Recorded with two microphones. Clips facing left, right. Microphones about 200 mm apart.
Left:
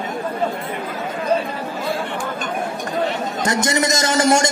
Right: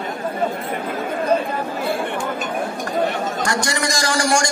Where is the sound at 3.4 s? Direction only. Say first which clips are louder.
Left 5 dB; 20° left (ahead or behind).